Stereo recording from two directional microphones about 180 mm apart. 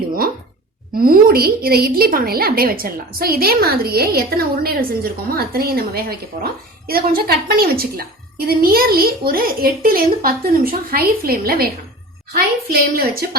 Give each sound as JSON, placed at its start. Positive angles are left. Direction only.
{"t": 0.9, "sound": "a woman's voice", "side_deg": -55}